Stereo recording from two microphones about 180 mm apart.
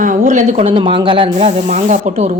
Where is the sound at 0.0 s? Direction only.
45° right (ahead or behind).